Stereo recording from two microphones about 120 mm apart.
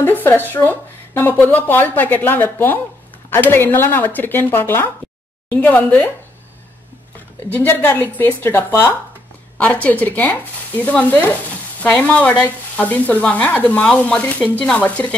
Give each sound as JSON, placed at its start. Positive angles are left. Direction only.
{"t": 0.2, "sound": "frying", "side_deg": 15}
{"t": 7.5, "sound": "frying", "side_deg": 15}